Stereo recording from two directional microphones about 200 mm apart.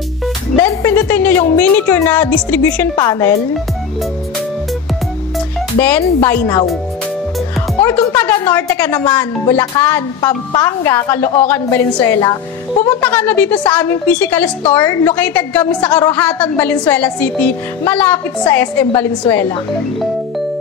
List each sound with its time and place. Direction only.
0.6 s speech: 10° left (ahead or behind)
5.8 s speech: 10° left (ahead or behind)
7.8 s speech: 10° left (ahead or behind)